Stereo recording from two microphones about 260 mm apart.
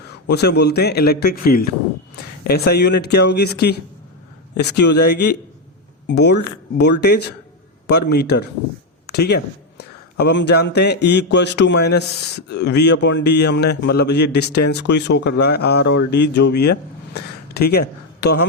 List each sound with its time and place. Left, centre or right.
0.3 s a man's voice: left